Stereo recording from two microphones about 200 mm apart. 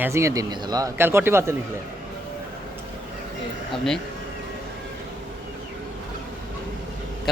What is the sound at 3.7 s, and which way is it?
Speech, centre (ahead or behind).